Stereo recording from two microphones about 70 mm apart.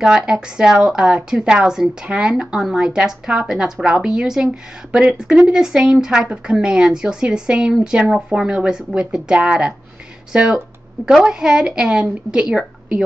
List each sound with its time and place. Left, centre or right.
0.0 s speech: centre